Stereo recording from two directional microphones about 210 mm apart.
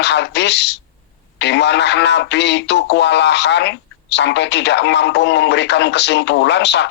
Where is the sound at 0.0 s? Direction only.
55° left (ahead or behind).